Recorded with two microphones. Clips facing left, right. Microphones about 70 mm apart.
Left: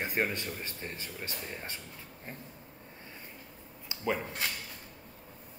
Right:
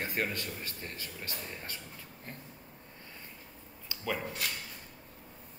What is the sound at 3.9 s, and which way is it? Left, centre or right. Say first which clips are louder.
Speech: left 3 dB; left.